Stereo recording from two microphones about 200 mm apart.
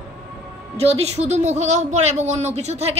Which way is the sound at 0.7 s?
30° right (ahead or behind).